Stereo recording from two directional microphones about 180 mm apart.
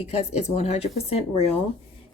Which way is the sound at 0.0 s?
35° left (ahead or behind).